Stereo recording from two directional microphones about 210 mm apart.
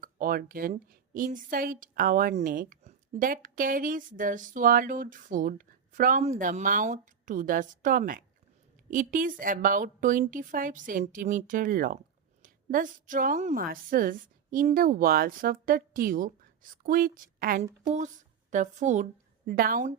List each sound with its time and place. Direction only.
0.0 s a woman's voice: 40° right (ahead or behind)